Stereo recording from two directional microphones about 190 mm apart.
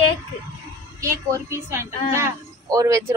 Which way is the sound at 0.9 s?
15° right (ahead or behind).